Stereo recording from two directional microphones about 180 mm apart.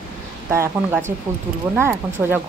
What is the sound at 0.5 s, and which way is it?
Speech, 15° right (ahead or behind).